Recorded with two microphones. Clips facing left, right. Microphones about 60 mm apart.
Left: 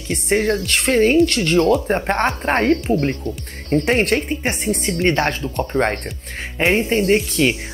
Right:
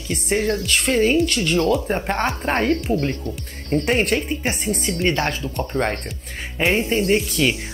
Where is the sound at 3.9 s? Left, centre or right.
Left.